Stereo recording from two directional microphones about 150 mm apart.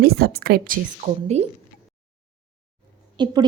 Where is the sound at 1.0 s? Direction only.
60° right (ahead or behind).